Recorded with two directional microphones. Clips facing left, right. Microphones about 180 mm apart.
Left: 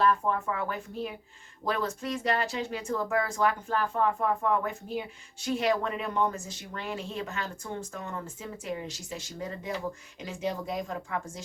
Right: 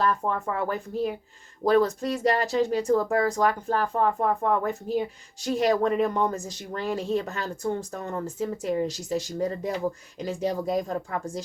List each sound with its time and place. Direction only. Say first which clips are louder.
0.0 s speech: even; 40° right (ahead or behind)